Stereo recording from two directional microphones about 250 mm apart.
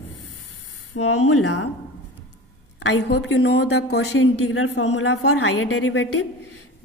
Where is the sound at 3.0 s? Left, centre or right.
Left.